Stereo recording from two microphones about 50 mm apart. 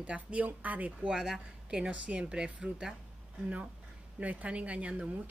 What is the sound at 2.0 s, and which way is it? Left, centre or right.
Speech, right.